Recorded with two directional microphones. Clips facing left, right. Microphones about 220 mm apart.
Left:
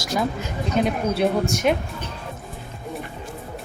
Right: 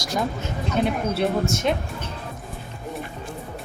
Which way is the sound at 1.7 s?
15° left (ahead or behind).